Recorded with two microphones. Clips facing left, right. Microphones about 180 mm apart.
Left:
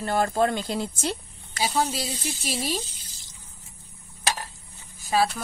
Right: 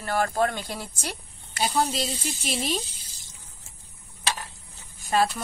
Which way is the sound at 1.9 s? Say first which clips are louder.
Right 2 dB; 5° left (ahead or behind).